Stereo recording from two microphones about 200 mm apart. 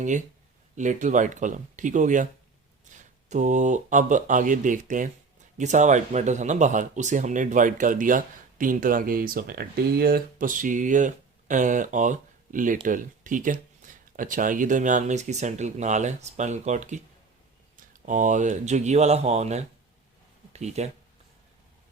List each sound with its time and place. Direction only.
0.8 s speech: 40° right (ahead or behind)